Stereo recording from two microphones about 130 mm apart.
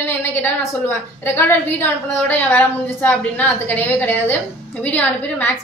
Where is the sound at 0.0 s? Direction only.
15° left (ahead or behind).